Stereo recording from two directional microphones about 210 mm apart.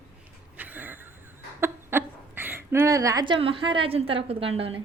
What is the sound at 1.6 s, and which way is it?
Speech, 10° right (ahead or behind).